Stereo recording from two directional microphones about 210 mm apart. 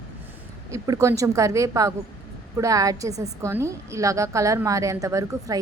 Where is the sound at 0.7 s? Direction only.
15° right (ahead or behind).